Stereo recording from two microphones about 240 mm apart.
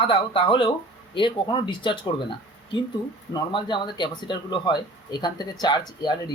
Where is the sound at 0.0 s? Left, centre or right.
Left.